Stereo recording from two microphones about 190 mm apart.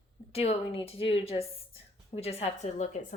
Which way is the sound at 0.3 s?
30° left (ahead or behind).